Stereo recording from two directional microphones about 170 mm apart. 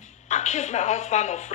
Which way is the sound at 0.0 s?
45° left (ahead or behind).